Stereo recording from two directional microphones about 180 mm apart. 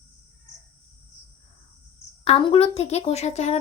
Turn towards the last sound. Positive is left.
turn(degrees=40)  # may be behind; listen again after turning